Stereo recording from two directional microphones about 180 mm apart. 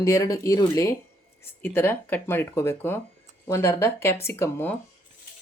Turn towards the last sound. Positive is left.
turn(degrees=10)  # may be behind; listen again after turning